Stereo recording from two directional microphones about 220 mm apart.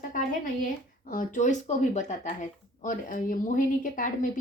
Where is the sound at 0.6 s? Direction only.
40° left (ahead or behind).